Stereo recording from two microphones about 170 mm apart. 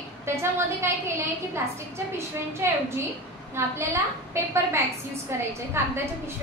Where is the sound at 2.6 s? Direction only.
15° right (ahead or behind).